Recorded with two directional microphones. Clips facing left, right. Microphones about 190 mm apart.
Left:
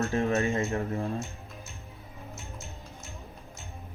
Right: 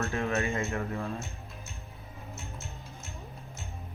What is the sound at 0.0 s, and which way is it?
A man's voice, 30° left (ahead or behind).